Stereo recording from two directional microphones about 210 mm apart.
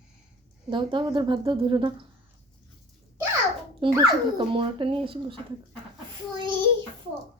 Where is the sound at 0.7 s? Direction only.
20° right (ahead or behind).